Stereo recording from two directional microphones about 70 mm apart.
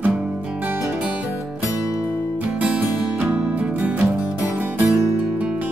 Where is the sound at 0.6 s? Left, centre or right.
Right.